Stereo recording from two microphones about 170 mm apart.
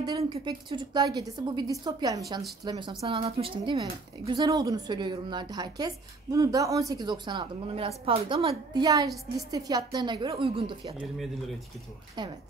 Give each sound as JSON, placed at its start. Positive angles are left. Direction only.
{"t": 0.2, "sound": "a woman's voice", "side_deg": -30}
{"t": 12.2, "sound": "speech", "side_deg": -25}